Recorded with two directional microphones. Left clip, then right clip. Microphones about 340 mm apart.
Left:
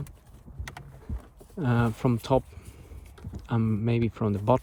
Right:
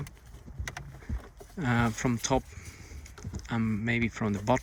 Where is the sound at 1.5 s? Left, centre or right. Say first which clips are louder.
Left 1 dB; centre.